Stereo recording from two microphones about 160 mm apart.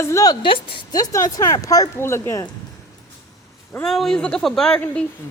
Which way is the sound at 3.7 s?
5° left (ahead or behind).